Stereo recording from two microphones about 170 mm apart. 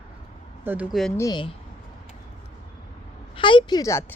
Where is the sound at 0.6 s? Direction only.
10° right (ahead or behind).